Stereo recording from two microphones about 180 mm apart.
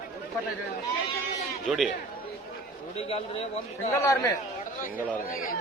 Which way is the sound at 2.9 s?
35° left (ahead or behind).